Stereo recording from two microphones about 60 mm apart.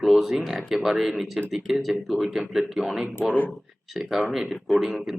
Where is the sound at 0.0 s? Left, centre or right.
Centre.